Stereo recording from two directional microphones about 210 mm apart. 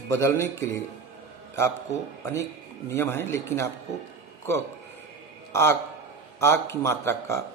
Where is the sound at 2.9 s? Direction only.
10° left (ahead or behind).